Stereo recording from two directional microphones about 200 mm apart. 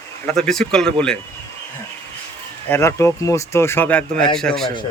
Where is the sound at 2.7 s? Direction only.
15° left (ahead or behind).